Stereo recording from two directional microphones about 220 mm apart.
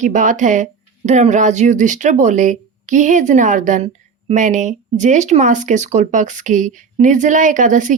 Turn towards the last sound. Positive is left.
turn(degrees=-35)  # may be behind; listen again after turning